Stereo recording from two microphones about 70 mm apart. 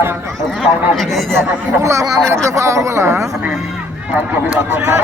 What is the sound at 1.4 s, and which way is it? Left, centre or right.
A man's voice, right.